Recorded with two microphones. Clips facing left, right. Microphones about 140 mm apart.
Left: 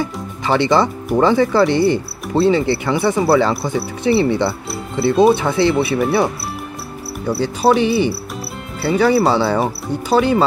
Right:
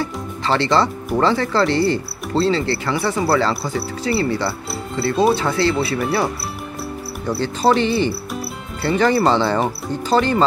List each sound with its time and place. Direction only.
0.0 s speech: 15° left (ahead or behind)
7.2 s speech: 10° left (ahead or behind)